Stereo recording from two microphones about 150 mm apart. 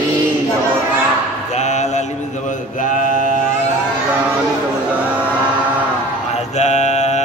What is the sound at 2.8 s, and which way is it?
Mantra, 60° left (ahead or behind).